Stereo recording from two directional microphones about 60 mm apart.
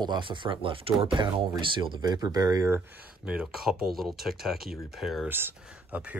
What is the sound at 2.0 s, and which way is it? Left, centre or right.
Speech, right.